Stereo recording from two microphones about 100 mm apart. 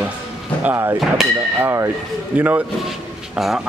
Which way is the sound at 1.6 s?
30° right (ahead or behind).